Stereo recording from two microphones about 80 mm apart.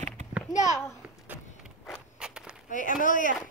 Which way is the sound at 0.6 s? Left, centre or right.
Left.